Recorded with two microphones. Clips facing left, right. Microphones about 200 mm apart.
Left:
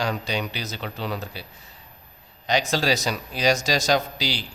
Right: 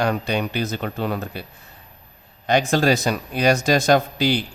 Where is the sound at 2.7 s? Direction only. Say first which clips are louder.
Right 5 dB; 55° right (ahead or behind).